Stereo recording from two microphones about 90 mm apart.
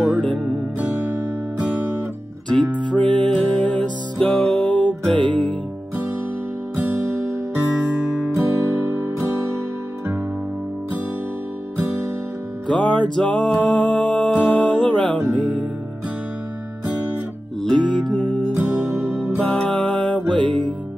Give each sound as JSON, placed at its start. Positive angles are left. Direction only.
{"t": 0.7, "sound": "music", "side_deg": -20}
{"t": 2.9, "sound": "music", "side_deg": 15}
{"t": 8.4, "sound": "guitar", "side_deg": -25}
{"t": 12.6, "sound": "music", "side_deg": 10}
{"t": 17.6, "sound": "music", "side_deg": 15}
{"t": 18.6, "sound": "music", "side_deg": -25}
{"t": 19.4, "sound": "music", "side_deg": 10}
{"t": 20.4, "sound": "music", "side_deg": -60}